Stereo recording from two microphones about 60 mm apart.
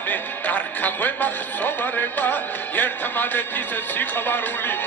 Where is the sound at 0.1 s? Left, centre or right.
Left.